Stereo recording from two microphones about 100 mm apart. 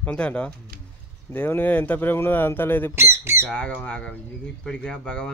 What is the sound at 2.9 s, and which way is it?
Speech, 25° right (ahead or behind).